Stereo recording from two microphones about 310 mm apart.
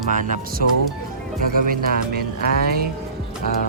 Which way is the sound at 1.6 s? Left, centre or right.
Right.